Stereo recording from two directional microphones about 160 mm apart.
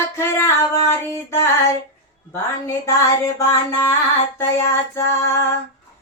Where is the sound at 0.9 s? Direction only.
15° left (ahead or behind).